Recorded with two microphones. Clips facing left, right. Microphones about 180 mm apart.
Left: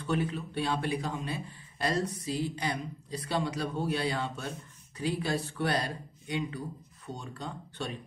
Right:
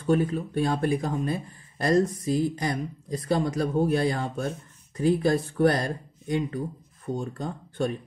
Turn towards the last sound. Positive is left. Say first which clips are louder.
# right 9 dB
turn(degrees=-45)  # may be behind; listen again after turning